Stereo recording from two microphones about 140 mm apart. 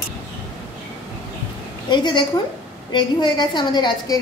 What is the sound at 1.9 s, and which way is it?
A woman's voice, 35° left (ahead or behind).